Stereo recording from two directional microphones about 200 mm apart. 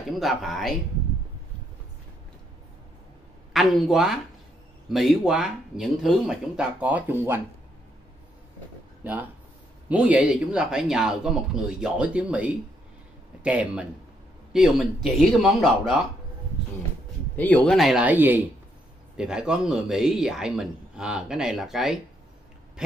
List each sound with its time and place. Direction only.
0.2 s a man's voice: centre (ahead or behind)
3.5 s a man's voice: centre (ahead or behind)
9.8 s a man's voice: 5° right (ahead or behind)
17.4 s a man's voice: 10° left (ahead or behind)
22.8 s oink: 5° right (ahead or behind)